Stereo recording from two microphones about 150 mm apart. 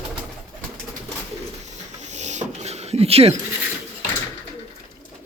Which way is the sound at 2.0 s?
50° right (ahead or behind).